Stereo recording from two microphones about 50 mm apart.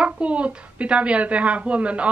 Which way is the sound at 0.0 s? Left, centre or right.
Right.